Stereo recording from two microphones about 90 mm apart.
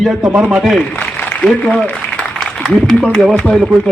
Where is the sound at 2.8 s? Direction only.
10° left (ahead or behind).